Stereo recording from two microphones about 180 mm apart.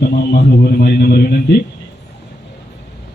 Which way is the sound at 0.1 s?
60° left (ahead or behind).